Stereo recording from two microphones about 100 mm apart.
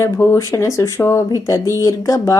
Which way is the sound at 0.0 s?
25° left (ahead or behind).